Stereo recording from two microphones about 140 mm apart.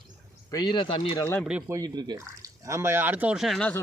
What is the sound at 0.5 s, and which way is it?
Speech, 30° left (ahead or behind).